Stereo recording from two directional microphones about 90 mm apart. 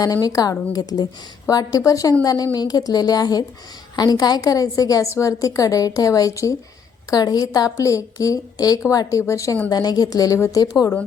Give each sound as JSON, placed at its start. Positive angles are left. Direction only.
{"t": 0.0, "sound": "a woman's voice", "side_deg": 45}
{"t": 7.1, "sound": "a woman's voice", "side_deg": 45}
{"t": 9.6, "sound": "a woman's voice", "side_deg": 50}